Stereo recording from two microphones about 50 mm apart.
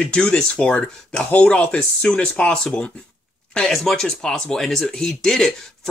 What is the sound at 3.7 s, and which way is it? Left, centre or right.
Speech, centre.